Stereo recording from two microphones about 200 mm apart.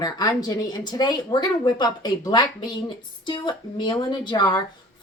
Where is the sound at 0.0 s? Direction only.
20° left (ahead or behind).